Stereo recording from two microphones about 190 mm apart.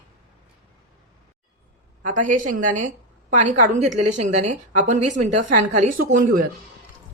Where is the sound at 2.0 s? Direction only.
45° right (ahead or behind).